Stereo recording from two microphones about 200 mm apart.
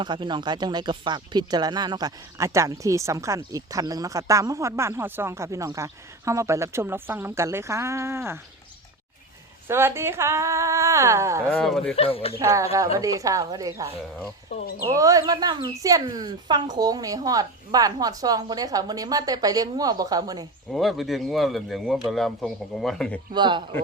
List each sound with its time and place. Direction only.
0.0 s speech: 25° right (ahead or behind)
9.6 s speech: 10° right (ahead or behind)
11.5 s speech: 5° left (ahead or behind)
11.9 s speech: 30° left (ahead or behind)
12.4 s speech: 15° right (ahead or behind)
14.5 s speech: 30° left (ahead or behind)
14.8 s speech: 15° right (ahead or behind)
20.7 s speech: centre (ahead or behind)
23.3 s speech: 25° right (ahead or behind)